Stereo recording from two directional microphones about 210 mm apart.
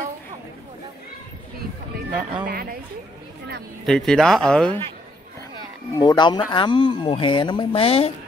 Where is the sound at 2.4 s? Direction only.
45° right (ahead or behind).